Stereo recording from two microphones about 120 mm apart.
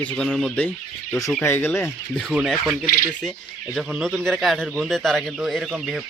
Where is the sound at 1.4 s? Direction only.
20° left (ahead or behind).